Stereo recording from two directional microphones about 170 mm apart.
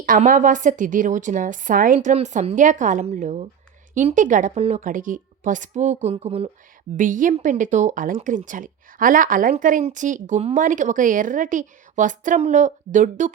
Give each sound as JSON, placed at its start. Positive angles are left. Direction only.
{"t": 0.0, "sound": "speech", "side_deg": -55}
{"t": 6.9, "sound": "speech", "side_deg": -50}